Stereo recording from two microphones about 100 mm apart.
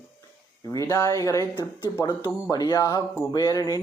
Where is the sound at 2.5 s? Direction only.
40° left (ahead or behind).